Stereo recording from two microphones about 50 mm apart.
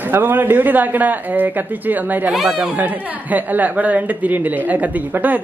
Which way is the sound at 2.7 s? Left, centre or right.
Right.